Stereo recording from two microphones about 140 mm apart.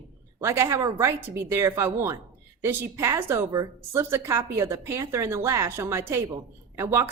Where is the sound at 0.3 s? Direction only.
20° right (ahead or behind).